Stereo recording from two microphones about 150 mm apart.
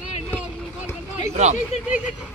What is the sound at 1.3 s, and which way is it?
Speech, 50° right (ahead or behind).